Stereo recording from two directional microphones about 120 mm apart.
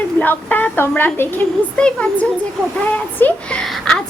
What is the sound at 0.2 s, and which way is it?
A woman's voice, 15° left (ahead or behind).